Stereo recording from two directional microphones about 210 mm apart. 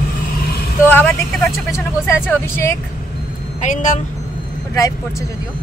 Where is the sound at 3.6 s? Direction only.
35° left (ahead or behind).